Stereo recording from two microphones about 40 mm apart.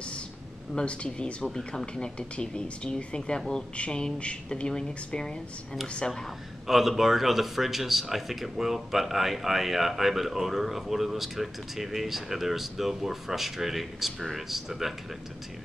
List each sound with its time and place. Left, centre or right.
0.7 s speech: left
3.7 s speech: left
6.7 s speech: centre